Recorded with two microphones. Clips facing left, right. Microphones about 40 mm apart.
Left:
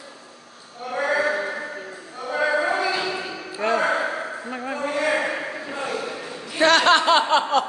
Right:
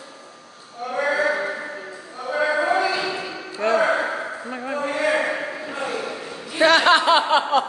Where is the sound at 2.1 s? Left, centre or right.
Centre.